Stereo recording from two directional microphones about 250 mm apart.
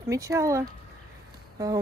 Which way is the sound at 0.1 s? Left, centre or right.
Centre.